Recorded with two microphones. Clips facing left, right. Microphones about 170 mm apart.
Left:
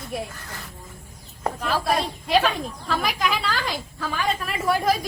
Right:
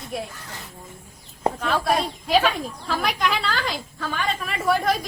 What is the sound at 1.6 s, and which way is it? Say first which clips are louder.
Speech: even; centre (ahead or behind).